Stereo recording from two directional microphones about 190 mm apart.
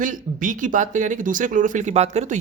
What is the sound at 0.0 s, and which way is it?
Speech, 45° right (ahead or behind).